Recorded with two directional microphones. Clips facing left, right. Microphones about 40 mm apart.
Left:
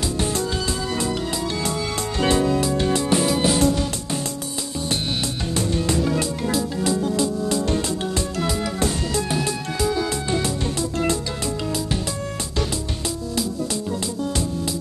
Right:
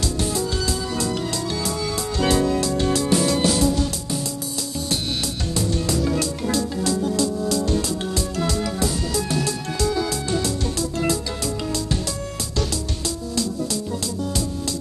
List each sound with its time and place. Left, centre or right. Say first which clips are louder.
1.6 s music: even; left
4.7 s music: left 1 dB; left
8.7 s music: left 1 dB; left
9.3 s music: even; left
13.9 s music: left 1 dB; left